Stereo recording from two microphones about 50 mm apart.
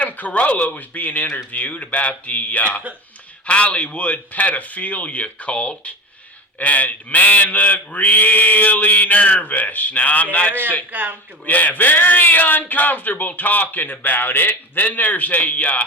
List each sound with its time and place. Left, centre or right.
0.0 s speech: left
10.9 s a man's voice: right
11.4 s speech: left